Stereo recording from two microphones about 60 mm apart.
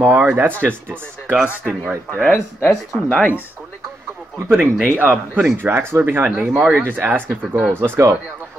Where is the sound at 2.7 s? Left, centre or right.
Centre.